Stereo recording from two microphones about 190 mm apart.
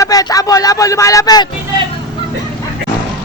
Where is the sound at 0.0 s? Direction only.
20° left (ahead or behind).